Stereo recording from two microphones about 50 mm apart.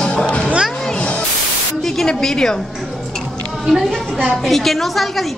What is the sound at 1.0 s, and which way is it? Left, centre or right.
Static, left.